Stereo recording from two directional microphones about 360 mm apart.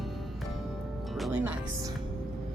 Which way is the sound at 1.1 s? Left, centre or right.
Centre.